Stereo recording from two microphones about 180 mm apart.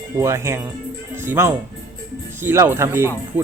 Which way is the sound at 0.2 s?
15° right (ahead or behind).